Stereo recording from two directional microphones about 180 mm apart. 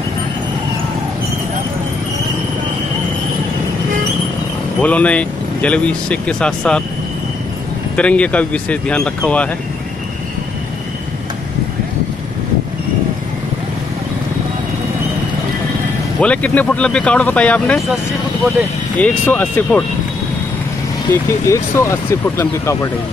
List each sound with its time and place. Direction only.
4.8 s speech: 5° left (ahead or behind)
7.9 s speech: 5° left (ahead or behind)
16.2 s speech: 5° left (ahead or behind)
18.9 s speech: 10° left (ahead or behind)
21.1 s speech: 15° left (ahead or behind)